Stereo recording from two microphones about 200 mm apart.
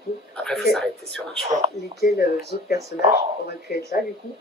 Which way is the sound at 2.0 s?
50° left (ahead or behind).